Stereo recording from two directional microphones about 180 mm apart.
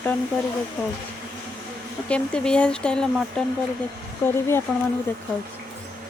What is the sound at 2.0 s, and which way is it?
Speech, 5° left (ahead or behind).